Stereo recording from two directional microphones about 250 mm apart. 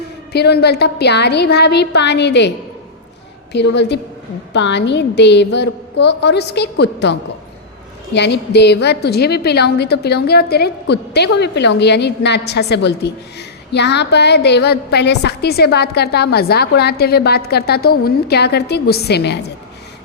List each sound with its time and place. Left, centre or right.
0.3 s a woman's voice: left
3.5 s a woman's voice: left